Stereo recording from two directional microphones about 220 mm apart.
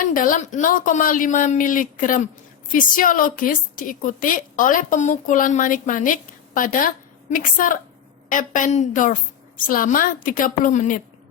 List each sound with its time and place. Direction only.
0.1 s a woman's voice: 40° left (ahead or behind)